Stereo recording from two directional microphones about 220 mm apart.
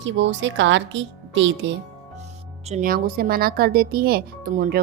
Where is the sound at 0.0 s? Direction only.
55° right (ahead or behind).